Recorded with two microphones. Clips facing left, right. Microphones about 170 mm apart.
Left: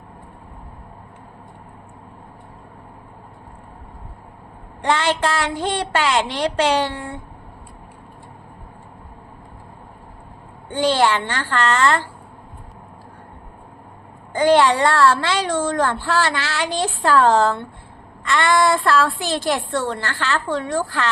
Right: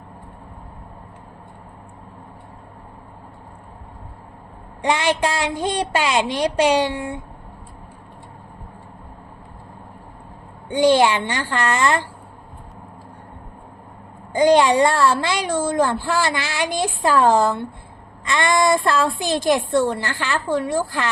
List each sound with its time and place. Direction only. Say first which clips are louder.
4.8 s speech: even; 15° right (ahead or behind)
10.7 s speech: right 3 dB; 15° right (ahead or behind)
14.3 s speech: right 1 dB; 15° right (ahead or behind)